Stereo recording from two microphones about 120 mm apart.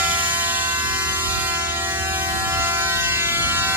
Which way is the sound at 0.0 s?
15° right (ahead or behind).